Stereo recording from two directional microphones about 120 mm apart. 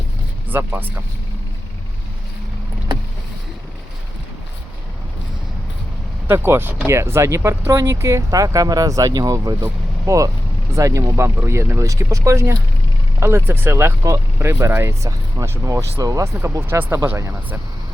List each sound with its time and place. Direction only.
0.5 s speech: 15° right (ahead or behind)
6.2 s speech: 20° right (ahead or behind)